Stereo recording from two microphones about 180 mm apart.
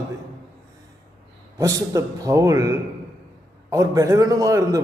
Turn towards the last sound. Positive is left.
turn(degrees=-15)  # may be behind; listen again after turning